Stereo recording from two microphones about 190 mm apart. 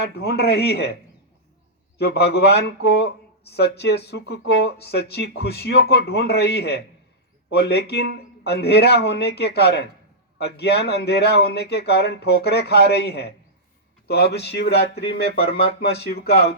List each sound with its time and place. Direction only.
0.0 s a man's voice: 60° left (ahead or behind)
2.0 s a man's voice: 60° left (ahead or behind)